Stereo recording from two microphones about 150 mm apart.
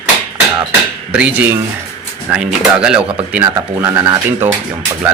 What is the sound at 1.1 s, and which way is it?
Speech, 10° right (ahead or behind).